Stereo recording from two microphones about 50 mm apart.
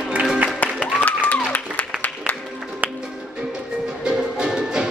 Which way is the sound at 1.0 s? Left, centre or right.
Left.